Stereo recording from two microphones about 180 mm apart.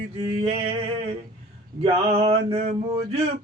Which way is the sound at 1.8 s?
35° right (ahead or behind).